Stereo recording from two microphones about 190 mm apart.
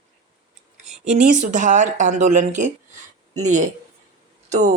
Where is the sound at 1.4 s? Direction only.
40° right (ahead or behind).